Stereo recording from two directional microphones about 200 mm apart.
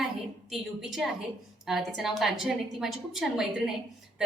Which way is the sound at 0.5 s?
Centre (ahead or behind).